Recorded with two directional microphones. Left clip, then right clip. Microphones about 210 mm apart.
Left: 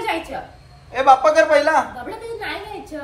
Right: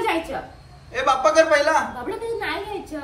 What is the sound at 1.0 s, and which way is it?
Speech, 15° left (ahead or behind).